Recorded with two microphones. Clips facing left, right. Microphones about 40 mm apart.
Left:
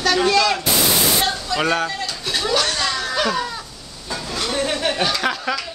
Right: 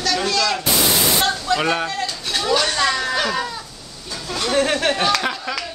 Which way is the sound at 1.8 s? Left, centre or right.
Centre.